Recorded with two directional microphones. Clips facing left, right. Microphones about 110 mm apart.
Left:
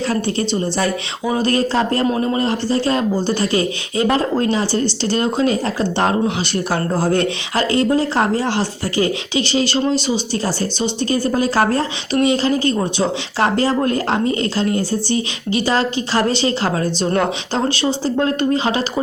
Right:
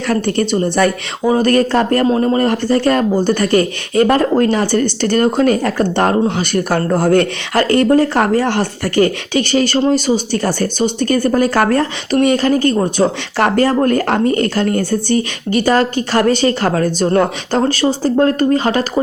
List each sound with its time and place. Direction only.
0.1 s speech: 55° right (ahead or behind)
0.5 s speech: 45° right (ahead or behind)
2.0 s speech: 35° right (ahead or behind)